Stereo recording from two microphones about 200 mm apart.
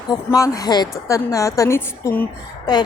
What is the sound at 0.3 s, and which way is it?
A woman's voice, 15° left (ahead or behind).